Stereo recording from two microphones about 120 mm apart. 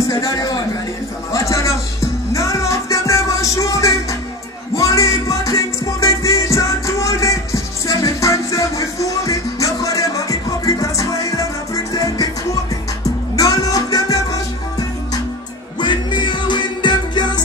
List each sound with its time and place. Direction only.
0.1 s a man's voice: 30° left (ahead or behind)
1.3 s music: 25° left (ahead or behind)
13.4 s music: 30° left (ahead or behind)